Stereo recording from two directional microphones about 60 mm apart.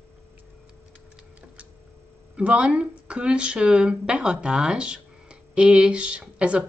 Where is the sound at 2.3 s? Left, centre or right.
Centre.